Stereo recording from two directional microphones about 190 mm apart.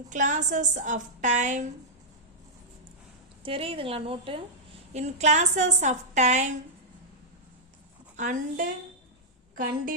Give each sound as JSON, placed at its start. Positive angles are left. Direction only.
{"t": 0.1, "sound": "a woman's voice", "side_deg": -40}
{"t": 3.4, "sound": "a woman's voice", "side_deg": -30}
{"t": 8.1, "sound": "a woman's voice", "side_deg": -40}